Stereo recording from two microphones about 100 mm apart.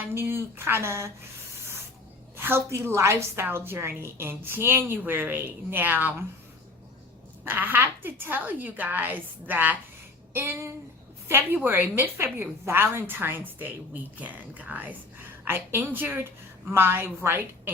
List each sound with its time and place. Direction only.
0.1 s a woman's voice: 25° right (ahead or behind)
2.3 s a woman's voice: 20° right (ahead or behind)
7.4 s a woman's voice: 20° right (ahead or behind)